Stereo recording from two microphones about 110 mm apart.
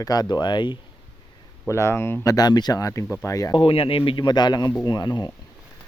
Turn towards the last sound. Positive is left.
turn(degrees=40)  # may be behind; listen again after turning